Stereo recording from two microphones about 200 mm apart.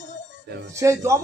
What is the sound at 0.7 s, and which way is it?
Speech, 15° right (ahead or behind).